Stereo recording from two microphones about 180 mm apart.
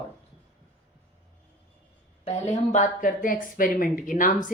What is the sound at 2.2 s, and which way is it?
Speech, 35° left (ahead or behind).